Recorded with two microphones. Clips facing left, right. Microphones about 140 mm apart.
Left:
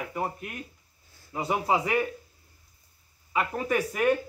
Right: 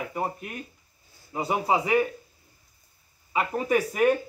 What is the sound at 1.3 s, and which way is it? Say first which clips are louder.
Speech: right 2 dB; 20° right (ahead or behind).